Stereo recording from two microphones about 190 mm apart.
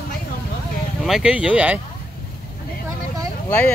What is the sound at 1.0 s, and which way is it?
Speech, 5° right (ahead or behind).